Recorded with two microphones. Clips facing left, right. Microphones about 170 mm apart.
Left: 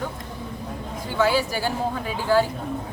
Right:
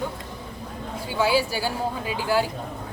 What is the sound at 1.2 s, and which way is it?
A woman's voice, 10° right (ahead or behind).